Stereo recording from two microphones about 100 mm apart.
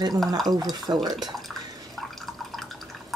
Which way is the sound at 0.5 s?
45° right (ahead or behind).